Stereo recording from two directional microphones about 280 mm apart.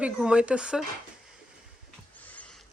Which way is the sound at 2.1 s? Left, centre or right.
Centre.